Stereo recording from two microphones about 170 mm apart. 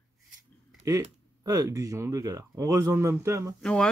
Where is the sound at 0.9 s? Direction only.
20° right (ahead or behind).